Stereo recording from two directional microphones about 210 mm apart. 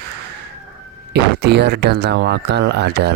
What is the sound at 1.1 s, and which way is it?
Speech, 55° right (ahead or behind).